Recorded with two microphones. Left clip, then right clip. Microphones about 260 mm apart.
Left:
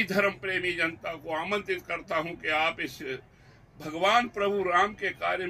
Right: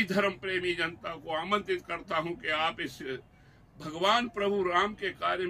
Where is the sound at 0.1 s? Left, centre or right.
Centre.